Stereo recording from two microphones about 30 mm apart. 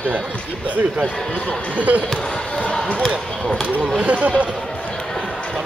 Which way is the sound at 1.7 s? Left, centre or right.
Right.